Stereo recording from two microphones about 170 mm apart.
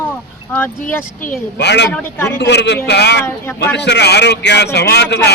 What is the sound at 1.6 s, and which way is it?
Speech, 85° left.